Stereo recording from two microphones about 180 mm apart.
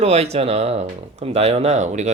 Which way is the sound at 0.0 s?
35° right (ahead or behind).